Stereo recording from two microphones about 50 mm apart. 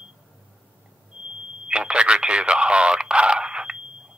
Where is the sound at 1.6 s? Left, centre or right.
Centre.